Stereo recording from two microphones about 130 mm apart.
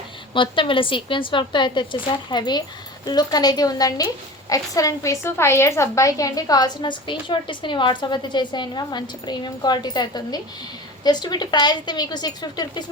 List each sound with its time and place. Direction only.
0.3 s a woman's voice: 40° left (ahead or behind)